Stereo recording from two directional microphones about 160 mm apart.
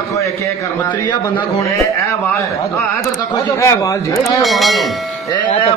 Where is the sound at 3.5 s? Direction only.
20° left (ahead or behind).